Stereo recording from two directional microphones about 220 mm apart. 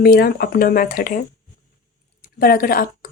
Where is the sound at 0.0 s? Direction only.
45° left (ahead or behind).